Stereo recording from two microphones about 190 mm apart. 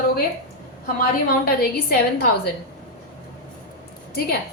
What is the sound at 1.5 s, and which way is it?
A woman's voice, 55° left (ahead or behind).